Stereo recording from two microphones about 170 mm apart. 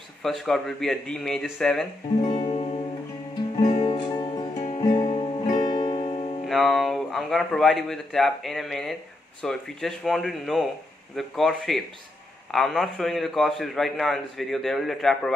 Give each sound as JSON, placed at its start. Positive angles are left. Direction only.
{"t": 0.2, "sound": "a man's voice", "side_deg": 0}
{"t": 2.2, "sound": "music", "side_deg": 30}
{"t": 3.6, "sound": "music", "side_deg": 45}
{"t": 3.9, "sound": "music", "side_deg": 25}
{"t": 4.6, "sound": "music", "side_deg": 40}
{"t": 6.4, "sound": "a man's voice", "side_deg": 0}